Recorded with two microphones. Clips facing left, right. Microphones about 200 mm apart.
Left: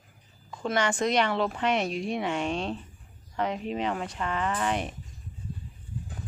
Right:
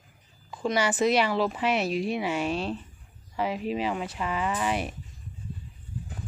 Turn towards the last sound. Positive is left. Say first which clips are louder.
# right 1 dB
turn(degrees=-5)  # may be behind; listen again after turning